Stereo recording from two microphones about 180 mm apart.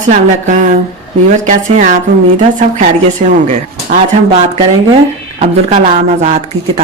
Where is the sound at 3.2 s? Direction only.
45° right (ahead or behind).